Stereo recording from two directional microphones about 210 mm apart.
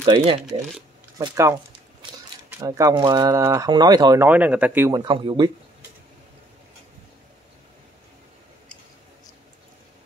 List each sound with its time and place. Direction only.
0.0 s speech: 25° right (ahead or behind)
0.4 s speech: centre (ahead or behind)
1.1 s speech: 15° right (ahead or behind)